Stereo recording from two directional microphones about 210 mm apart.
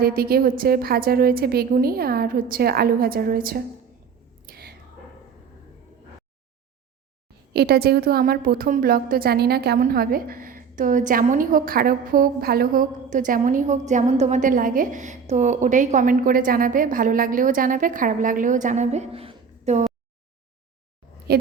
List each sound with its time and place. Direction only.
0.0 s a woman's voice: 45° right (ahead or behind)
4.4 s whispering: 45° right (ahead or behind)
7.5 s a woman's voice: 50° right (ahead or behind); by 19.8 s 30° right (ahead or behind)
21.3 s a woman's voice: 45° right (ahead or behind)